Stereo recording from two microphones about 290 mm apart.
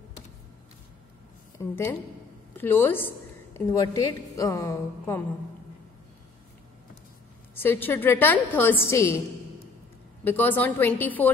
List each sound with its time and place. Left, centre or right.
1.6 s a woman's voice: centre
7.5 s a woman's voice: centre
10.2 s a woman's voice: centre